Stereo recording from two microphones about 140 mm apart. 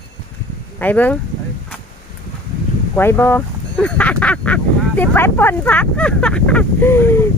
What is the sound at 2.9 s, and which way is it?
Speech, 15° left (ahead or behind).